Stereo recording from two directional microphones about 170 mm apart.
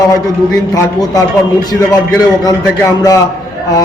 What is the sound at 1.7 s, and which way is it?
A man's voice, 20° left (ahead or behind).